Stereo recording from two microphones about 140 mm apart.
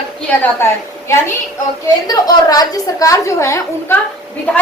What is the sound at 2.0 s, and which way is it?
A woman's voice, 25° left (ahead or behind).